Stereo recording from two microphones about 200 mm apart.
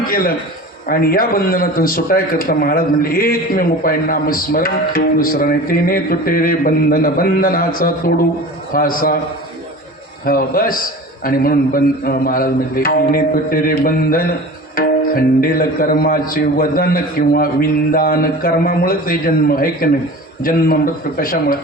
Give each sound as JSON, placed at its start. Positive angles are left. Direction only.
{"t": 0.1, "sound": "a man's voice", "side_deg": 45}
{"t": 10.2, "sound": "a man's voice", "side_deg": 45}